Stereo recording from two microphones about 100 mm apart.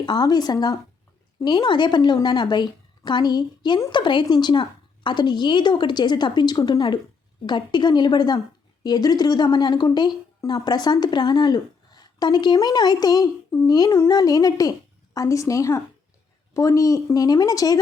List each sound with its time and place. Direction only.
0.0 s a woman's voice: 45° left (ahead or behind)